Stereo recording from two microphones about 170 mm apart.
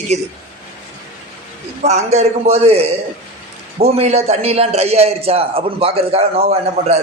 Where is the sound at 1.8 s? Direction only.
40° right (ahead or behind).